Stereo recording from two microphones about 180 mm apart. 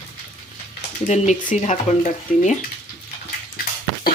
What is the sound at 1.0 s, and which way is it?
Speech, 40° left (ahead or behind).